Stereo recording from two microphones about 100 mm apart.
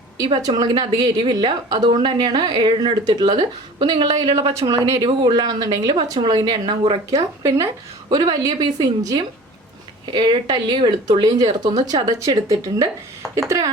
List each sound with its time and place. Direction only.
0.4 s speech: 40° right (ahead or behind)
7.1 s speech: 30° right (ahead or behind)
8.1 s speech: 40° right (ahead or behind)
13.2 s a sound: centre (ahead or behind)